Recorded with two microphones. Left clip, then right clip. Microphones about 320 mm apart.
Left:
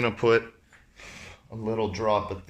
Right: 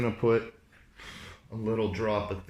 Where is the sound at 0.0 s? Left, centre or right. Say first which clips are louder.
Left 4 dB; left.